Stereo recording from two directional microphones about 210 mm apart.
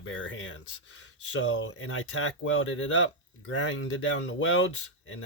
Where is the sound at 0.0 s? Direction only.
65° left (ahead or behind).